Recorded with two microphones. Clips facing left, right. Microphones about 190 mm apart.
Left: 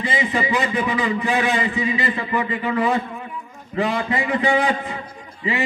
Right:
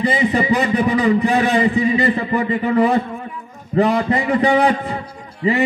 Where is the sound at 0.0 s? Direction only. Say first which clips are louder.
Right 5 dB; 35° right (ahead or behind).